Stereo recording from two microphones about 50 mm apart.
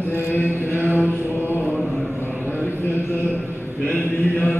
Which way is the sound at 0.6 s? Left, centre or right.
Left.